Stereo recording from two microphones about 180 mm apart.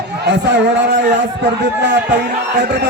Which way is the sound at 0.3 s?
75° right (ahead or behind).